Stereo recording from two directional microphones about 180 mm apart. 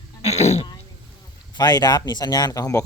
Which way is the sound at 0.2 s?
35° left (ahead or behind).